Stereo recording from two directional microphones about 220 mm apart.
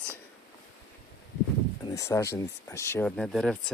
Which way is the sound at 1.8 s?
15° left (ahead or behind).